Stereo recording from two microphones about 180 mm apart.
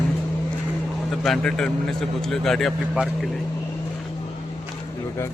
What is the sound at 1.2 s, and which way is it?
Speech, 5° left (ahead or behind).